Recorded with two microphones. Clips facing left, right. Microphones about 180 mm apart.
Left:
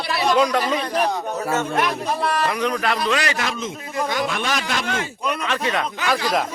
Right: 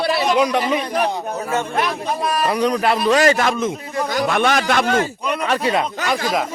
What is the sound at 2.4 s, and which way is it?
A man's voice, 35° right (ahead or behind).